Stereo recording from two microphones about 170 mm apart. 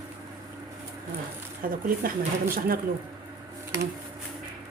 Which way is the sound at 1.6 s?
55° right (ahead or behind).